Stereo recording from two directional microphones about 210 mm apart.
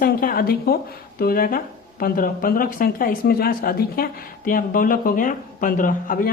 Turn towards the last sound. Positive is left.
turn(degrees=40)  # may be behind; listen again after turning